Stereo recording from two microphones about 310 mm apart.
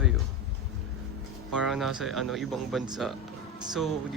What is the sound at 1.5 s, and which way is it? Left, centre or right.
A man's voice, centre.